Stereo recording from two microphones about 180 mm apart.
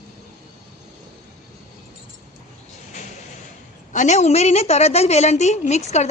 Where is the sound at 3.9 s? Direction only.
40° left (ahead or behind).